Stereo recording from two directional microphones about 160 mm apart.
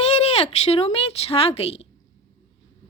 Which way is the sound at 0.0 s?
40° left (ahead or behind).